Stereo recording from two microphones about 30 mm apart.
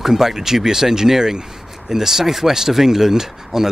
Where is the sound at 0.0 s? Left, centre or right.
Centre.